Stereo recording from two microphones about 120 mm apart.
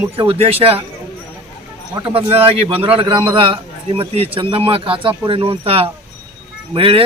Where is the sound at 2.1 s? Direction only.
50° right (ahead or behind).